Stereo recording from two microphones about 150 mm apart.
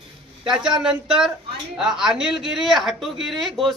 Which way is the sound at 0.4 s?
5° right (ahead or behind).